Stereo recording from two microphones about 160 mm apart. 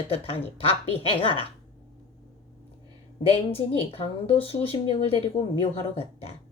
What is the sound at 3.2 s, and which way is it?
Speech, 35° left (ahead or behind).